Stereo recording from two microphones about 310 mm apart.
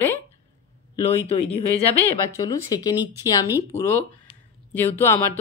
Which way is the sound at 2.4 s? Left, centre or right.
Centre.